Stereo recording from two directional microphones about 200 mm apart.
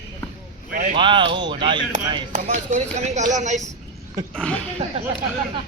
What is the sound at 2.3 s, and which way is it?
Speech, 35° right (ahead or behind).